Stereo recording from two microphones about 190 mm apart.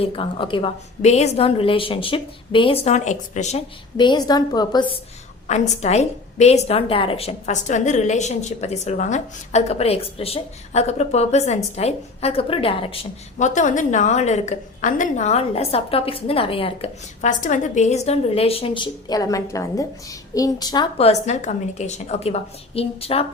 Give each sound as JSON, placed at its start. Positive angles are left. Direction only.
{"t": 0.0, "sound": "a woman's voice", "side_deg": 25}
{"t": 3.9, "sound": "a woman's voice", "side_deg": 25}
{"t": 5.5, "sound": "a woman's voice", "side_deg": 35}
{"t": 17.2, "sound": "a woman's voice", "side_deg": 40}